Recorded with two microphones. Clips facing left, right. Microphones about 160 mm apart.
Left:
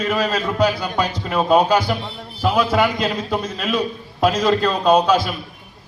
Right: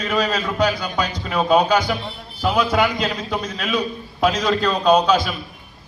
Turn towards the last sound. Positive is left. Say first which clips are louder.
# left 1 dB
turn(degrees=5)  # may be behind; listen again after turning